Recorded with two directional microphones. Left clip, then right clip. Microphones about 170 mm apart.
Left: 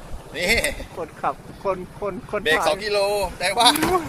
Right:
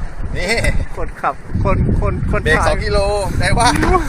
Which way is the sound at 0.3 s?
25° left (ahead or behind).